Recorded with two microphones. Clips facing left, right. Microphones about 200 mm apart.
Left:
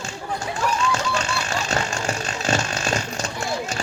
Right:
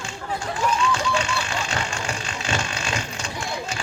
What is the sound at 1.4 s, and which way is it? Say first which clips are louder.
Vehicle: left 3 dB; 40° left (ahead or behind).